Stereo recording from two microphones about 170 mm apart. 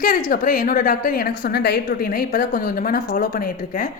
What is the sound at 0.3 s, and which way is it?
A woman's voice, 55° left (ahead or behind).